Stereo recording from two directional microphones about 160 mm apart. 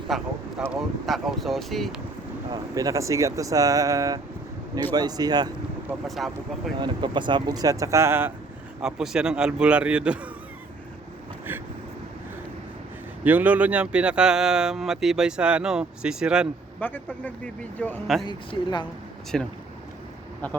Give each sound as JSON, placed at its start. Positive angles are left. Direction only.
{"t": 0.1, "sound": "speech", "side_deg": 0}
{"t": 2.5, "sound": "speech", "side_deg": -20}
{"t": 6.1, "sound": "speech", "side_deg": 0}
{"t": 6.7, "sound": "speech", "side_deg": -30}
{"t": 8.8, "sound": "speech", "side_deg": -5}
{"t": 13.2, "sound": "speech", "side_deg": -10}
{"t": 16.8, "sound": "a man's voice", "side_deg": 10}
{"t": 18.3, "sound": "speech", "side_deg": 30}
{"t": 19.3, "sound": "speech", "side_deg": 0}